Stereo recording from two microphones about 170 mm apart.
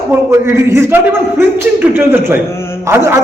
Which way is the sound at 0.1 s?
15° right (ahead or behind).